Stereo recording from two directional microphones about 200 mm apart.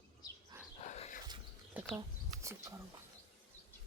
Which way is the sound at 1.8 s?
10° right (ahead or behind).